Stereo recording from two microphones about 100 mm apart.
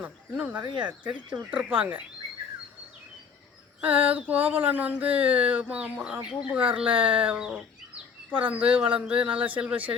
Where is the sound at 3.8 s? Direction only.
15° right (ahead or behind).